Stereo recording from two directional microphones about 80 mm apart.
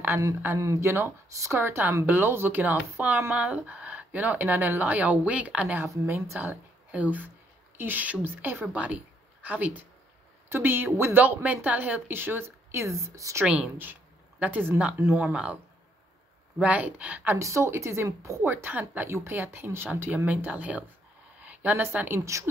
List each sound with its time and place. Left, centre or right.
0.6 s speech: right; by 5.8 s centre
6.0 s a woman's voice: right
13.5 s speech: centre
17.4 s speech: right
18.4 s speech: right
21.4 s a sound: right
21.8 s speech: right